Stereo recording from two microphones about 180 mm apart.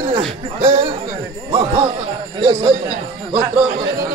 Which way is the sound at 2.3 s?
25° right (ahead or behind).